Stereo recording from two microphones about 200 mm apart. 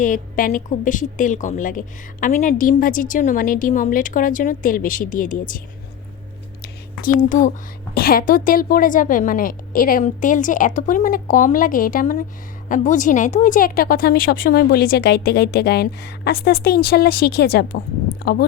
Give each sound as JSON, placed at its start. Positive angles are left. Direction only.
{"t": 0.0, "sound": "a woman's voice", "side_deg": 40}
{"t": 7.0, "sound": "a woman's voice", "side_deg": 40}